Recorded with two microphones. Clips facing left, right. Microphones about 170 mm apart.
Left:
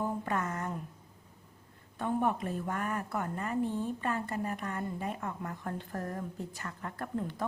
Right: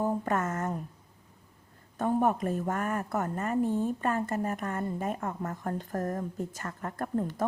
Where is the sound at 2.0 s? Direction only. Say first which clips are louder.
Right 4 dB; 45° right (ahead or behind).